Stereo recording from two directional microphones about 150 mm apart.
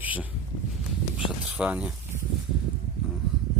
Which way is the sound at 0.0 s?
10° right (ahead or behind).